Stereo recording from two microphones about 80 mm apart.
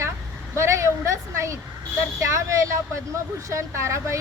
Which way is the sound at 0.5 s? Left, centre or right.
Right.